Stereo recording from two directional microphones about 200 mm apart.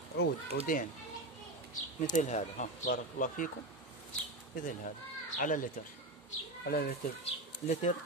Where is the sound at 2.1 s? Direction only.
35° left (ahead or behind).